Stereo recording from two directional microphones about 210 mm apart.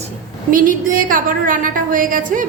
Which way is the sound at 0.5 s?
40° right (ahead or behind).